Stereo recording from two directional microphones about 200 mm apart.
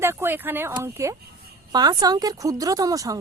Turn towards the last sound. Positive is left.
turn(degrees=-15)  # may be behind; listen again after turning